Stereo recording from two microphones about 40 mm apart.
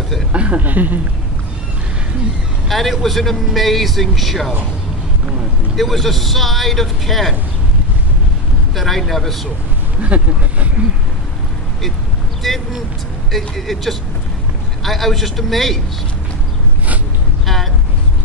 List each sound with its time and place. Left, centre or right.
0.3 s speech: right
2.7 s speech: centre
5.8 s speech: centre
8.7 s speech: centre
10.0 s speech: right
13.3 s speech: centre